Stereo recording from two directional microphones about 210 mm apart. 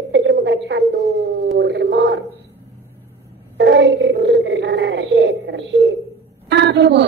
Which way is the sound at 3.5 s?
55° right (ahead or behind).